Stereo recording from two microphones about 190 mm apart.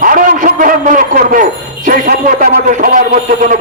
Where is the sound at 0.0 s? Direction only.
45° right (ahead or behind).